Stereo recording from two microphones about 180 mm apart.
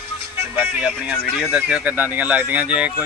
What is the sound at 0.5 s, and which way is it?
Speech, 5° right (ahead or behind).